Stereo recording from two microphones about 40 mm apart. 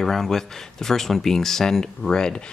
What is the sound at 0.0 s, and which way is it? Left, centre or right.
Speech, centre.